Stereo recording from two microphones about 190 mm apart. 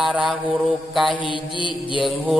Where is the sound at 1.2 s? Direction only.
25° left (ahead or behind).